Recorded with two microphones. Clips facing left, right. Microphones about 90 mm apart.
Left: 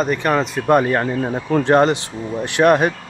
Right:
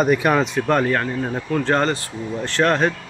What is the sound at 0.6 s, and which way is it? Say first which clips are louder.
Speech: left 3 dB; 10° left (ahead or behind).